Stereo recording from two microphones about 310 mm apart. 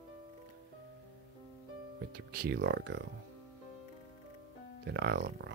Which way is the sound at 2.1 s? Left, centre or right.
Right.